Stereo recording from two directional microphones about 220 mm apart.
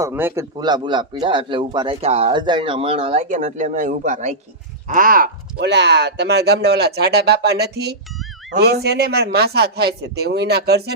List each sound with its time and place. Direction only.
0.0 s a man's voice: 10° right (ahead or behind); by 10.9 s 45° right (ahead or behind)